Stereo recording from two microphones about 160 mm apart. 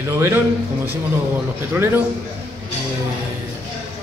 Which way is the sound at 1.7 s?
10° right (ahead or behind).